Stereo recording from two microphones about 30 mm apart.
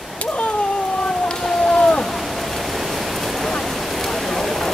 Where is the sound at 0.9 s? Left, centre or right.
Centre.